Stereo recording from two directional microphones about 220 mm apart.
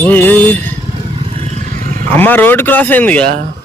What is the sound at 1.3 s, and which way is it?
Roar, 30° right (ahead or behind).